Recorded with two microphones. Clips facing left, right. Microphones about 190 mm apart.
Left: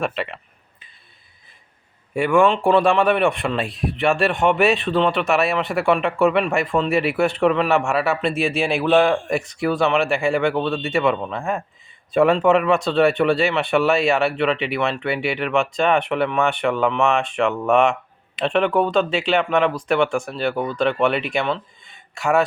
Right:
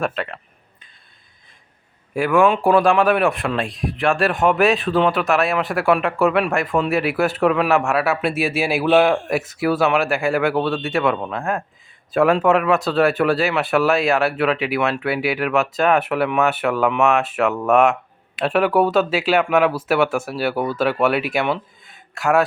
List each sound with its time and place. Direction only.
0.0 s speech: centre (ahead or behind)
2.1 s speech: centre (ahead or behind)